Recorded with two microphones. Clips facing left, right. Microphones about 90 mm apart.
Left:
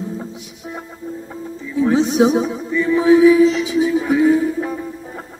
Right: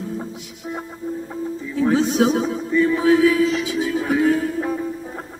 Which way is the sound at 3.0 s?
15° left (ahead or behind).